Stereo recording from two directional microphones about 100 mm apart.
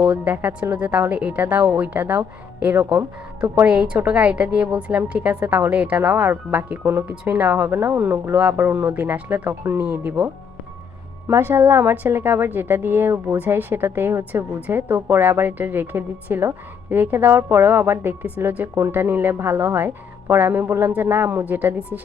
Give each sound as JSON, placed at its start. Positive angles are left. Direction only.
{"t": 0.0, "sound": "a woman's voice", "side_deg": -15}
{"t": 11.3, "sound": "a woman's voice", "side_deg": -20}